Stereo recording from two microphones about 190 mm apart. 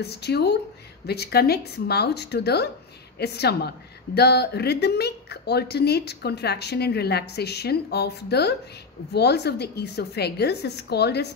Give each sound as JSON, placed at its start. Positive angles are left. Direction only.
{"t": 0.0, "sound": "a woman's voice", "side_deg": 60}